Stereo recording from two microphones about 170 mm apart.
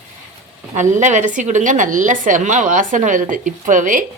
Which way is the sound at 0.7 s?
45° right (ahead or behind).